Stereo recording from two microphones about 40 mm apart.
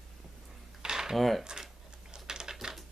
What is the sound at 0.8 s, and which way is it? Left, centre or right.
Cutlery, centre.